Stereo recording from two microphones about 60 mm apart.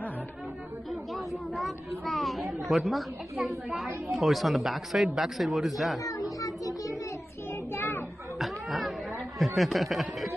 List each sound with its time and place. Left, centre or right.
1.1 s a woman's voice: centre
5.9 s a child's voice: left
7.7 s children playing: left
8.4 s chatter: centre
9.6 s a woman's voice: centre